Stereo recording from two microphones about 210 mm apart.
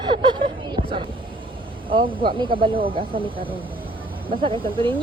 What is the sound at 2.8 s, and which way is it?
Speech, 25° right (ahead or behind).